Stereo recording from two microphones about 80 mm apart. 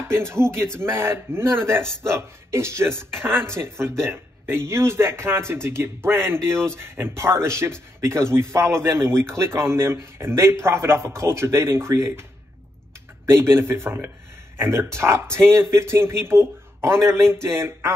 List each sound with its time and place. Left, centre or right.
0.1 s a man's voice: right